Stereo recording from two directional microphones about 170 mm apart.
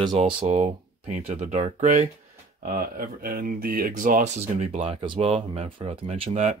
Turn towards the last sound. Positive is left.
turn(degrees=-40)  # may be behind; listen again after turning